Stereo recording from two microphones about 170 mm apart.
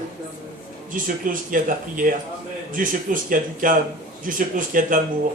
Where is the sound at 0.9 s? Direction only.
50° right (ahead or behind).